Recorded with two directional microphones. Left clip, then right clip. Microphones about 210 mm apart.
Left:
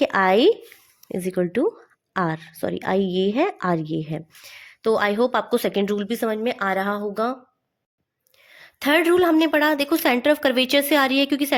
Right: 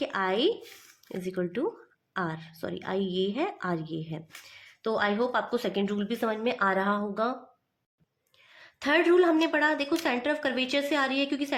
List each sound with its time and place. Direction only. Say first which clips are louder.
0.0 s speech: left 10 dB; 45° left (ahead or behind)
8.4 s a woman's voice: left 7 dB; 40° left (ahead or behind)